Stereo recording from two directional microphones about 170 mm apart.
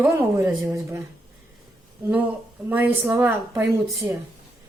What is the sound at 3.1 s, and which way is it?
A woman's voice, 10° right (ahead or behind).